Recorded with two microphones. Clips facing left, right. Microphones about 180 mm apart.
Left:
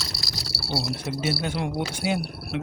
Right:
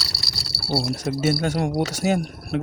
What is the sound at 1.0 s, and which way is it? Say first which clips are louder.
Speech: right 5 dB; 45° right (ahead or behind).